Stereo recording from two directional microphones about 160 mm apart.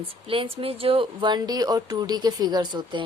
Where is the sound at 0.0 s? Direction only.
35° right (ahead or behind).